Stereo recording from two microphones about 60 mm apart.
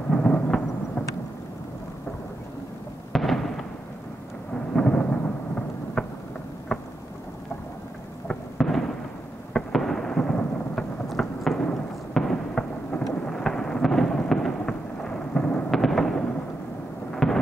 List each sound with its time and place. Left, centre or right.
0.1 s thunder: centre
3.1 s fireworks: centre
4.7 s thunder: centre
6.0 s a sound: centre
8.3 s fireworks: centre
9.5 s thunder: centre
11.1 s fireworks: centre
11.7 s a sound: centre
17.1 s fireworks: centre